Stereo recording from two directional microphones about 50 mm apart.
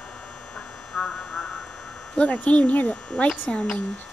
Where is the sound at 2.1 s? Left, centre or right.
Left.